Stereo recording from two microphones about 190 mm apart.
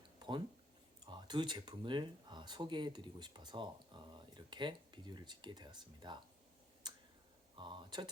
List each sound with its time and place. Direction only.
0.2 s a sound: 25° right (ahead or behind)
1.0 s speech: 25° right (ahead or behind)
6.8 s clicking: 20° right (ahead or behind)
7.5 s speech: 25° right (ahead or behind)